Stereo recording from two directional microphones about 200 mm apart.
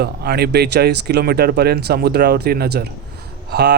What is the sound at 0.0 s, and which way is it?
Speech, 55° right (ahead or behind).